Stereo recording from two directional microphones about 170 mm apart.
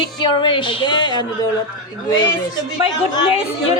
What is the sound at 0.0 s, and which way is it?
Speech, 25° left (ahead or behind).